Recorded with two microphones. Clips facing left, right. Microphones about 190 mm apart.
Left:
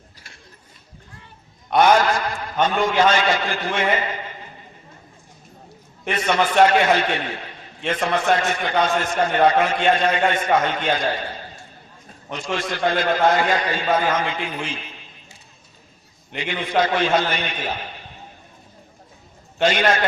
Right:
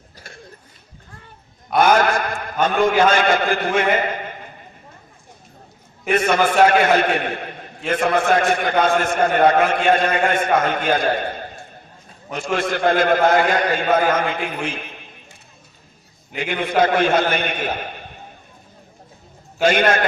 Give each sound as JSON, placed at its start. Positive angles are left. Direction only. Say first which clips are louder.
{"t": 2.0, "sound": "a man's voice", "louder": "right 2 dB", "side_deg": -55}
{"t": 6.1, "sound": "a man's voice", "louder": "right 4 dB", "side_deg": -50}
{"t": 16.4, "sound": "a man's voice", "louder": "right 3 dB", "side_deg": -55}
{"t": 19.6, "sound": "a man's voice", "louder": "right 2 dB", "side_deg": -55}